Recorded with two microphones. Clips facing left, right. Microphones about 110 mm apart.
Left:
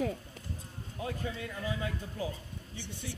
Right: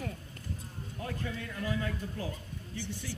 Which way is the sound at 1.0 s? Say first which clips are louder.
Left 1 dB; 20° left (ahead or behind).